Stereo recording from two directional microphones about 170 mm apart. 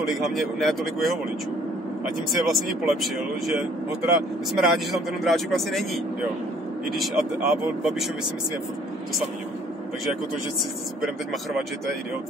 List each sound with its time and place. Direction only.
0.0 s speech: centre (ahead or behind)
2.0 s speech: centre (ahead or behind)
6.9 s speech: centre (ahead or behind)